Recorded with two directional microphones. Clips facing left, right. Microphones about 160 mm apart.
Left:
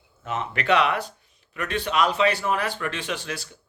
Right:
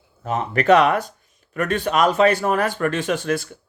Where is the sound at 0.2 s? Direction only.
40° right (ahead or behind).